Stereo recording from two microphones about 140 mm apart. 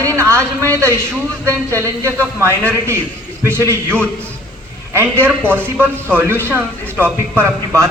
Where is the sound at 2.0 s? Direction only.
20° right (ahead or behind).